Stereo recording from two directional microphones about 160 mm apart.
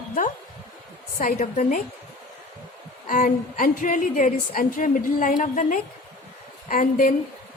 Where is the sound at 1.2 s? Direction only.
55° left (ahead or behind).